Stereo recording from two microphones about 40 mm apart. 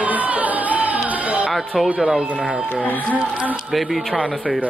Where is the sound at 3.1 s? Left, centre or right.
Right.